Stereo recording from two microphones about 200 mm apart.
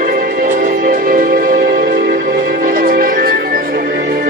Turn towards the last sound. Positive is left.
turn(degrees=-45)  # may be behind; listen again after turning